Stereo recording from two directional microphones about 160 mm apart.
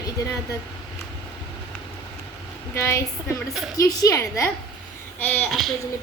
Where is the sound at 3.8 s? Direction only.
20° left (ahead or behind).